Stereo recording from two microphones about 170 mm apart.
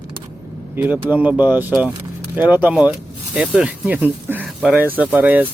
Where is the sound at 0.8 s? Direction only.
10° right (ahead or behind).